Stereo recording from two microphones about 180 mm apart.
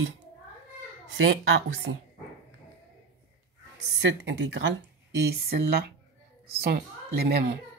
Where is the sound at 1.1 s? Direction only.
90° right.